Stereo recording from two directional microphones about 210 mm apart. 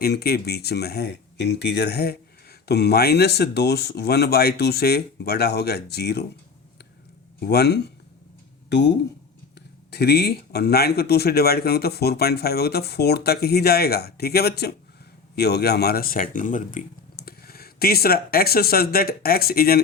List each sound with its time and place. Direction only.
0.0 s speech: 50° left (ahead or behind)
7.3 s speech: 50° left (ahead or behind)